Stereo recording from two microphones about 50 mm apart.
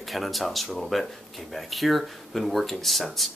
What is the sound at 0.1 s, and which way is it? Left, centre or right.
Speech, centre.